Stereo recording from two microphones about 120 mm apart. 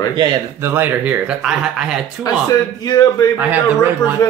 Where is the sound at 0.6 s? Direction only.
20° right (ahead or behind).